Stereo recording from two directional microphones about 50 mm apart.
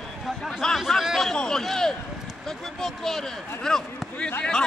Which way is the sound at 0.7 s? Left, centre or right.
Centre.